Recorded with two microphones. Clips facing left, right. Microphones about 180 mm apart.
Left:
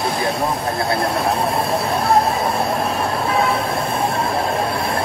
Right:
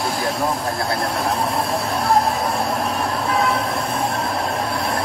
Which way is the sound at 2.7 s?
25° left (ahead or behind).